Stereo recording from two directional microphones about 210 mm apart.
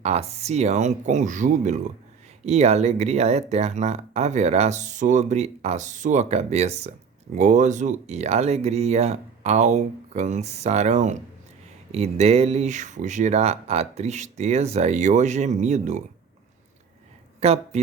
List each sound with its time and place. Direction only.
0.0 s speech: 30° right (ahead or behind)
17.4 s speech: 30° right (ahead or behind)